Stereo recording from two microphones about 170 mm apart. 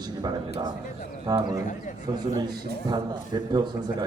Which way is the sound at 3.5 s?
25° right (ahead or behind).